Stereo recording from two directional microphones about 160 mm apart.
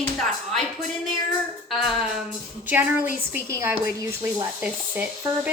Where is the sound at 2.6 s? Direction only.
10° right (ahead or behind).